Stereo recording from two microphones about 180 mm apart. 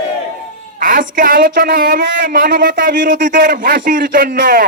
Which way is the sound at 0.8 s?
50° right (ahead or behind).